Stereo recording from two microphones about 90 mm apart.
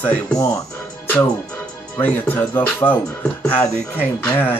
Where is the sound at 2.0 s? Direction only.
20° left (ahead or behind).